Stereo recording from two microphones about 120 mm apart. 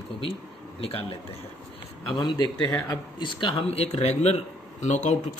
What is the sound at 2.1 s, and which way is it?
Speech, 40° left (ahead or behind).